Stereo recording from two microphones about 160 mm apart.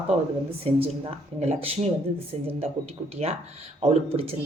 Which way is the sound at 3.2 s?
45° right (ahead or behind).